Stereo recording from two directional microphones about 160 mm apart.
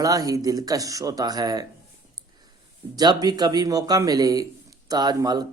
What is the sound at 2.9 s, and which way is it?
A man's voice, 25° right (ahead or behind).